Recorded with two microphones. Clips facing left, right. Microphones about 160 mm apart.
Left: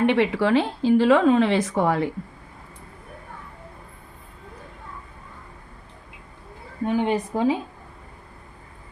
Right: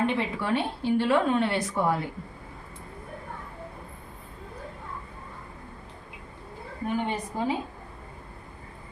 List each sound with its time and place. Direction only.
0.0 s a woman's voice: 75° left (ahead or behind); by 2.0 s 90° left
6.8 s a woman's voice: 90° left